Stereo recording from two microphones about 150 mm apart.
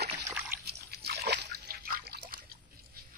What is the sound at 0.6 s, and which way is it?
Splash, 90° right.